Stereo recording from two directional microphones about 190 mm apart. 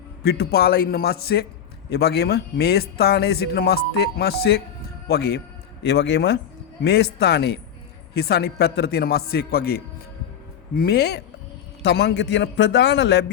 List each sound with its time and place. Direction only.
0.2 s a man's voice: 60° left (ahead or behind)